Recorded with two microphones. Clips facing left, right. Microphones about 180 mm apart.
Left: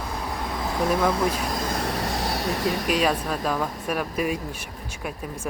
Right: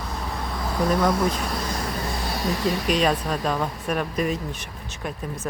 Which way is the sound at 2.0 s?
80° left.